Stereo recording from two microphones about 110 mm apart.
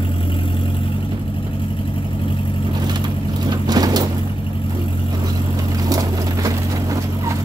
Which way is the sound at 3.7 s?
35° right (ahead or behind).